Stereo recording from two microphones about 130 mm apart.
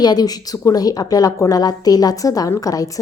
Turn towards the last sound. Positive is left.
turn(degrees=25)  # may be behind; listen again after turning